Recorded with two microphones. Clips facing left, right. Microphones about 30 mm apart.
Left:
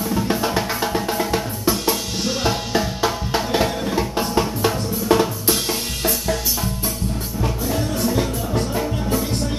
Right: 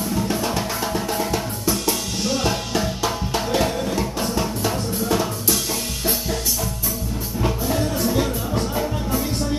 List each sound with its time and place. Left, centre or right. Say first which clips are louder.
0.1 s drum: left 3 dB; centre
5.1 s drum: left 6 dB; left
8.0 s music: even; centre